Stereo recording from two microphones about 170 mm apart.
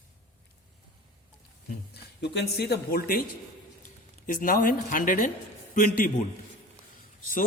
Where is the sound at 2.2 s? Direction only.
85° left; by 6.1 s 55° left (ahead or behind).